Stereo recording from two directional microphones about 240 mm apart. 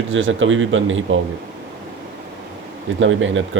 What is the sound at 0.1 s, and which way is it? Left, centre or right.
Speech, right.